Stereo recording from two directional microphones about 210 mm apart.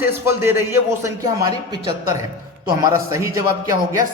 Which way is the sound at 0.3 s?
10° right (ahead or behind).